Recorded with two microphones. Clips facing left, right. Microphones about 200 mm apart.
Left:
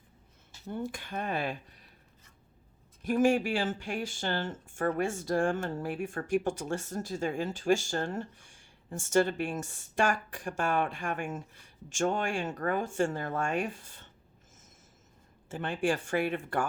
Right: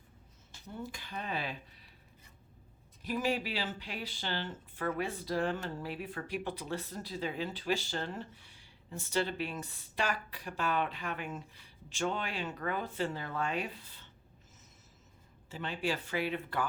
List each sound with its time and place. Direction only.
0.7 s speech: 50° left (ahead or behind)
3.0 s speech: 50° left (ahead or behind)
15.4 s speech: 50° left (ahead or behind)